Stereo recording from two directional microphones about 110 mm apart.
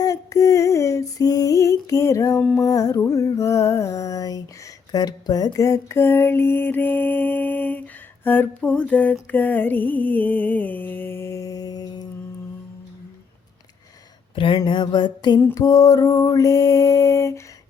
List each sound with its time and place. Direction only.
0.0 s music: 30° left (ahead or behind)
4.9 s mantra: 40° left (ahead or behind)
14.3 s a sound: 45° left (ahead or behind)
15.5 s mantra: 35° left (ahead or behind)